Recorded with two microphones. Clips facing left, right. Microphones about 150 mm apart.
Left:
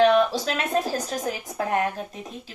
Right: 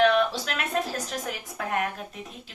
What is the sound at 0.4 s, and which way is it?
A woman's voice, 30° left (ahead or behind).